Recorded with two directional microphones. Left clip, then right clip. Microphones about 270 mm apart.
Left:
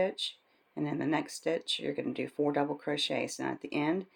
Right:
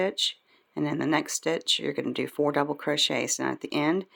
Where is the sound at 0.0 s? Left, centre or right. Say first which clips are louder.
Right 5 dB; right.